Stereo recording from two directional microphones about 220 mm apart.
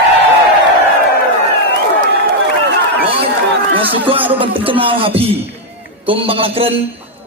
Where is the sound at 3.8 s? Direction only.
25° right (ahead or behind).